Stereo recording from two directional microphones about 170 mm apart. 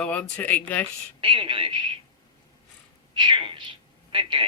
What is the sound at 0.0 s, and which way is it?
Speech, 10° left (ahead or behind).